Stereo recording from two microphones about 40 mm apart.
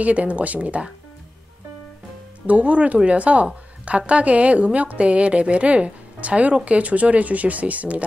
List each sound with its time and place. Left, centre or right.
0.0 s a woman's voice: right
2.4 s a woman's voice: right